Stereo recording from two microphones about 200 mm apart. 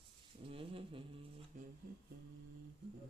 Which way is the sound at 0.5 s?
25° right (ahead or behind).